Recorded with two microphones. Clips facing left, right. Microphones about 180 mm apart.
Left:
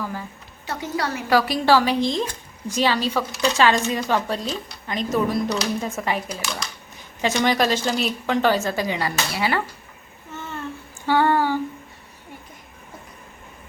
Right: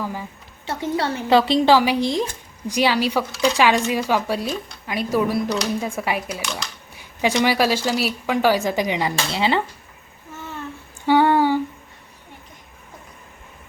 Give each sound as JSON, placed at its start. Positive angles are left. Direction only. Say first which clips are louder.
{"t": 0.0, "sound": "a woman's voice", "louder": "right 2 dB", "side_deg": -15}
{"t": 0.7, "sound": "a woman's voice", "louder": "right 3 dB", "side_deg": -25}
{"t": 6.9, "sound": "a sound", "louder": "right 2 dB", "side_deg": -10}
{"t": 7.3, "sound": "a woman's voice", "louder": "right 1 dB", "side_deg": -10}
{"t": 11.0, "sound": "humming", "louder": "right 3 dB", "side_deg": -15}